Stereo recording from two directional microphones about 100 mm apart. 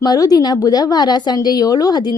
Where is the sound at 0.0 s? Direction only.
40° left (ahead or behind).